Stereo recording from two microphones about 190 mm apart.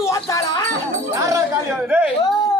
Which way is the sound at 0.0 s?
15° left (ahead or behind).